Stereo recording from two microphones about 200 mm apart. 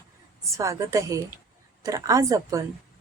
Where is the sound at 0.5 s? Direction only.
15° right (ahead or behind).